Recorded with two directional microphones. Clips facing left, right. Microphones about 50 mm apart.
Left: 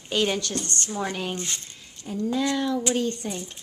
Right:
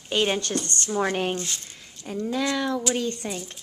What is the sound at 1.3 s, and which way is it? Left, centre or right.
Speech, left.